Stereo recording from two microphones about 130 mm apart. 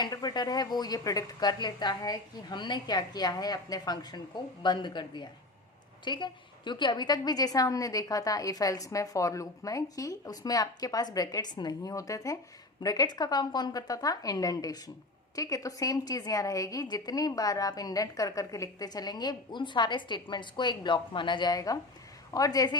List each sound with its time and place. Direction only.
0.0 s a woman's voice: 30° left (ahead or behind)